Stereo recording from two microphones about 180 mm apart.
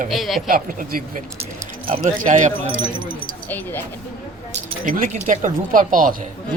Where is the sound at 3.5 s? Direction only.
10° left (ahead or behind).